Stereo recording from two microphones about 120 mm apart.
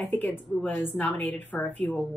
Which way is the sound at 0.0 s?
15° left (ahead or behind).